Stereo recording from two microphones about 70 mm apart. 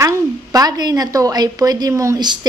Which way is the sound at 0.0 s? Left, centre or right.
Right.